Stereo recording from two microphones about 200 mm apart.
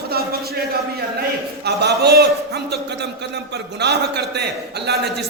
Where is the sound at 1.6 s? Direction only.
55° right (ahead or behind).